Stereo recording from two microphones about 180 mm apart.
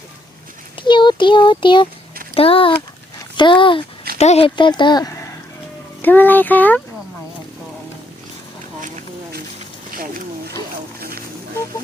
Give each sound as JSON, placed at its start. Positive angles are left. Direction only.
{"t": 0.8, "sound": "speech", "side_deg": 25}
{"t": 6.0, "sound": "a child's voice", "side_deg": 10}
{"t": 9.9, "sound": "a sound", "side_deg": -55}